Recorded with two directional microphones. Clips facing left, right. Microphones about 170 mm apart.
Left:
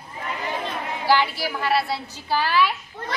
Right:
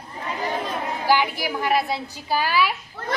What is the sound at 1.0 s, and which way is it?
A woman's voice, 15° right (ahead or behind).